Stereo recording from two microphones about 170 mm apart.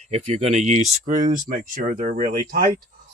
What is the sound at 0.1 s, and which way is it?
Speech, 35° right (ahead or behind).